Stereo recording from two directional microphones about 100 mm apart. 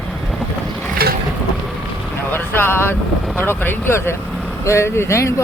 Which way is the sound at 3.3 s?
20° left (ahead or behind).